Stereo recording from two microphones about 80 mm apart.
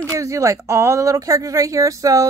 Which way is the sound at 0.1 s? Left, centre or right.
Right.